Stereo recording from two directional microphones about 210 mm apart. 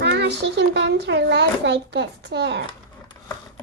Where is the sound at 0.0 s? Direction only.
55° right (ahead or behind).